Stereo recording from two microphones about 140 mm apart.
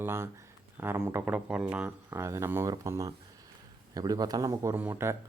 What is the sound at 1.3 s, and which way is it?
Speech, 5° right (ahead or behind).